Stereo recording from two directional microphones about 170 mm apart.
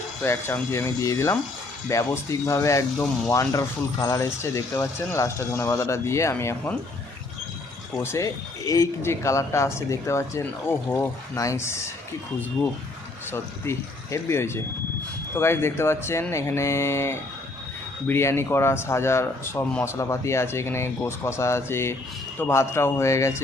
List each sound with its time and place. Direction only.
0.2 s speech: 15° left (ahead or behind)
7.9 s speech: 15° left (ahead or behind)
13.3 s speech: 15° left (ahead or behind)